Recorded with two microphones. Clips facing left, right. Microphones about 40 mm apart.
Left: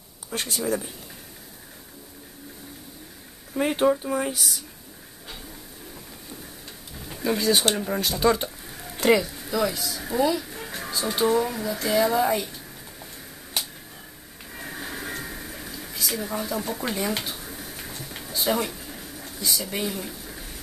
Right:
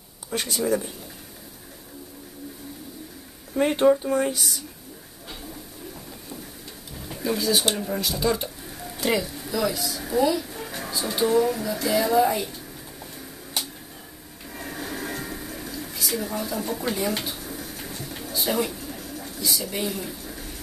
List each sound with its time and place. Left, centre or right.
0.3 s speech: centre
3.5 s speech: centre
7.7 s speech: centre
8.2 s speech: left
9.2 s speech: centre
14.5 s television: centre